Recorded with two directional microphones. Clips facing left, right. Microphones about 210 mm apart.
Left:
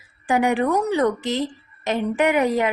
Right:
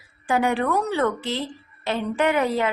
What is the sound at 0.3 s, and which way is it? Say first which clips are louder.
A woman's voice: left 2 dB; 15° left (ahead or behind).